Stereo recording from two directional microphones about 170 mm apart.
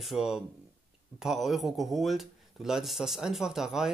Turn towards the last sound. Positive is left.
turn(degrees=0)  # may be behind; listen again after turning